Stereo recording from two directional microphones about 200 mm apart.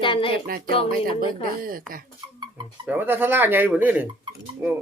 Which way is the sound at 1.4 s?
45° right (ahead or behind).